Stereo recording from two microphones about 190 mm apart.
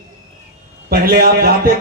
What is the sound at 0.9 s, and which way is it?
Speech, 50° right (ahead or behind).